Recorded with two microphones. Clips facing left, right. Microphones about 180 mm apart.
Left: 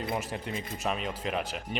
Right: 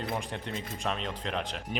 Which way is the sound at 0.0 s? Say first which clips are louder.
Left 1 dB; 5° left (ahead or behind).